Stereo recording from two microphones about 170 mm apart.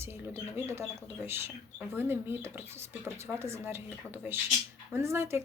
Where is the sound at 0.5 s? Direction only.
15° right (ahead or behind).